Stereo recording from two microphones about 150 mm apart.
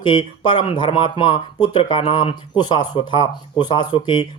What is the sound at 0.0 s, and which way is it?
Speech, 30° left (ahead or behind).